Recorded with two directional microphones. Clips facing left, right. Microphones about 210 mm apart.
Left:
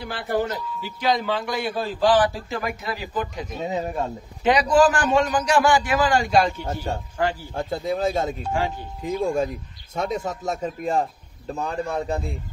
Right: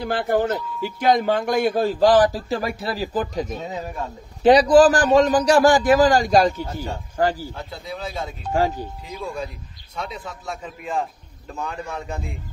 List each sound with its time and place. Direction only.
0.0 s speech: 45° right (ahead or behind)
3.6 s speech: 25° left (ahead or behind)
4.4 s a man's voice: 35° right (ahead or behind)
6.7 s a man's voice: 40° left (ahead or behind)
7.2 s a man's voice: 40° right (ahead or behind)
7.5 s a man's voice: 45° left (ahead or behind)